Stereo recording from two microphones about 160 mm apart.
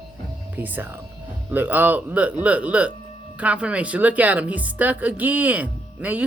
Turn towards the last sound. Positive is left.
turn(degrees=-10)  # may be behind; listen again after turning